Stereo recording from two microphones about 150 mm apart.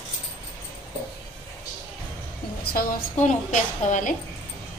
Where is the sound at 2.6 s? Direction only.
80° left.